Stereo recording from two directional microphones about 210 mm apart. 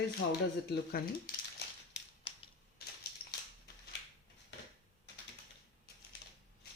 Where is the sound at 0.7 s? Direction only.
45° left (ahead or behind).